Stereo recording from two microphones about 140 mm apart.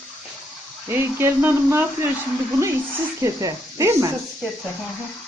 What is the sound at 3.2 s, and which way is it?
Speech, 20° right (ahead or behind).